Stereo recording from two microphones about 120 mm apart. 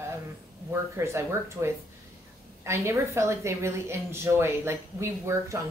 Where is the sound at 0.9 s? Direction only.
25° right (ahead or behind).